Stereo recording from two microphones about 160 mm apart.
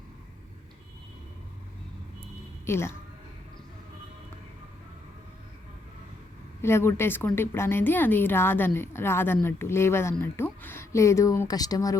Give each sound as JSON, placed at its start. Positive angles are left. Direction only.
{"t": 2.6, "sound": "speech", "side_deg": 15}
{"t": 6.6, "sound": "a woman's voice", "side_deg": 15}